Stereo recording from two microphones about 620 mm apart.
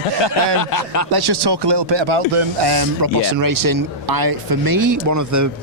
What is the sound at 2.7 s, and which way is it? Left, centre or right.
Speech, right.